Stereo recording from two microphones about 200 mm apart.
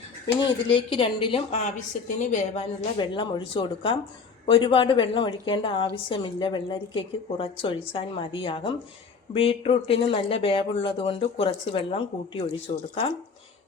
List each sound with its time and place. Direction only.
0.4 s a woman's voice: 25° left (ahead or behind)
3.0 s a woman's voice: 25° left (ahead or behind)